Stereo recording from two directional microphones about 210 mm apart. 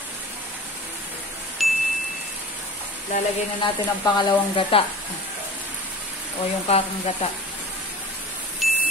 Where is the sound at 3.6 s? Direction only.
20° left (ahead or behind).